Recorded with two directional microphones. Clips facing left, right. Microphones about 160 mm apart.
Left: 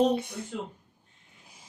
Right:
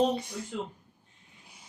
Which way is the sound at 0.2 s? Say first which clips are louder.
Left 2 dB; 55° left (ahead or behind).